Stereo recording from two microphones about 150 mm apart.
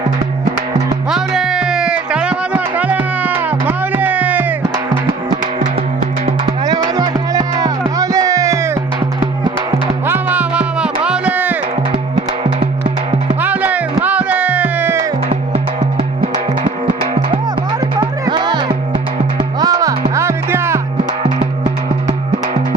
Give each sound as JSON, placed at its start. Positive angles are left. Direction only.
{"t": 1.1, "sound": "music", "side_deg": -5}
{"t": 5.7, "sound": "music", "side_deg": -40}
{"t": 6.7, "sound": "music", "side_deg": -25}
{"t": 10.1, "sound": "music", "side_deg": -10}
{"t": 13.4, "sound": "music", "side_deg": -10}
{"t": 15.3, "sound": "music", "side_deg": -40}
{"t": 18.0, "sound": "music", "side_deg": -30}